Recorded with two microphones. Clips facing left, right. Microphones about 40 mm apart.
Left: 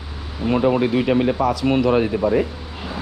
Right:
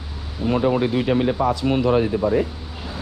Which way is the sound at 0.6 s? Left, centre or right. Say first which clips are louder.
Left 3 dB; left.